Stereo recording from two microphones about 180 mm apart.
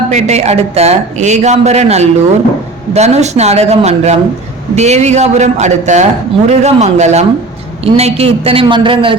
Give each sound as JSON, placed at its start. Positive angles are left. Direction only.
{"t": 0.1, "sound": "speech", "side_deg": -40}